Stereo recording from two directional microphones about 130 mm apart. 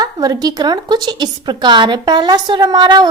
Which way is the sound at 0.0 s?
30° right (ahead or behind).